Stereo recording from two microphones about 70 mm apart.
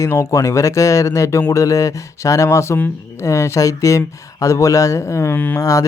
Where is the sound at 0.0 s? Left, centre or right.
Left.